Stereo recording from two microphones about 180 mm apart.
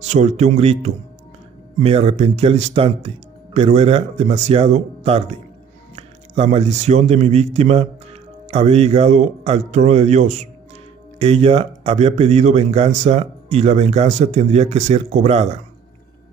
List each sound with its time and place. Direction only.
0.0 s speech: 40° right (ahead or behind)